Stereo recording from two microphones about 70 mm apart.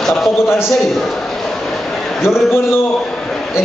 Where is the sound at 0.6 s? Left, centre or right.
Centre.